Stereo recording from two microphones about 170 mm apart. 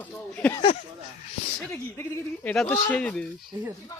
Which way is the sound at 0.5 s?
30° left (ahead or behind).